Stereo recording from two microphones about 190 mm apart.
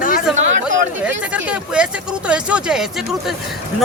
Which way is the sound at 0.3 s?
Centre (ahead or behind).